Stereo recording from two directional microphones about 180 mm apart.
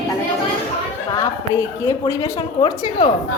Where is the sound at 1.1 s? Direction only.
15° left (ahead or behind).